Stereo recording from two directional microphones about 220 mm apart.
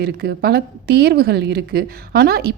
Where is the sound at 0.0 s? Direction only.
45° right (ahead or behind).